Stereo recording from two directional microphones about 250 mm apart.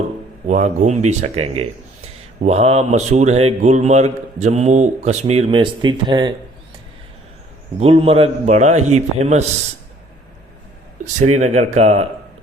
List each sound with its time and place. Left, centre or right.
0.4 s speech: right
7.8 s speech: right
11.3 s speech: right